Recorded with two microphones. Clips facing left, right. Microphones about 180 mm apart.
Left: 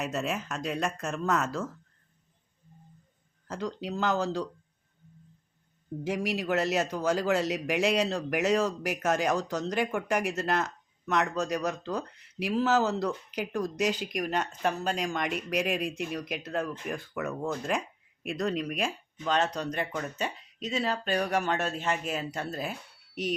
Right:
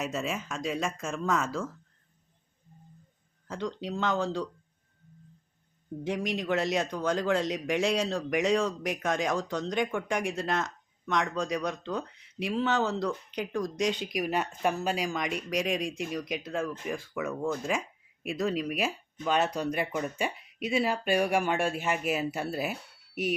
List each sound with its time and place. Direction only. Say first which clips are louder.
0.0 s speech: left 1 dB; centre (ahead or behind)
3.4 s speech: even; centre (ahead or behind)
6.1 s speech: even; 5° left (ahead or behind)